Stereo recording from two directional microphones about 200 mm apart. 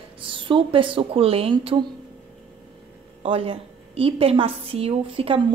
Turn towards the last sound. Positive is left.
turn(degrees=-25)  # may be behind; listen again after turning